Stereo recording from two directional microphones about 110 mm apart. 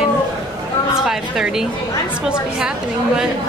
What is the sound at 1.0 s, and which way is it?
Speech, 5° right (ahead or behind).